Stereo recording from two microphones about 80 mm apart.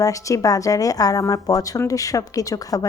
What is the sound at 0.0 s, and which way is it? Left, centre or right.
A woman's voice, left.